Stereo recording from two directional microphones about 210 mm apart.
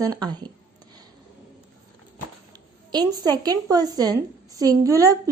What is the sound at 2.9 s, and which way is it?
A woman's voice, 20° right (ahead or behind).